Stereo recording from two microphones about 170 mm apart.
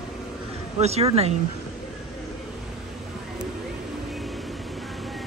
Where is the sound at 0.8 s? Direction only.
35° right (ahead or behind).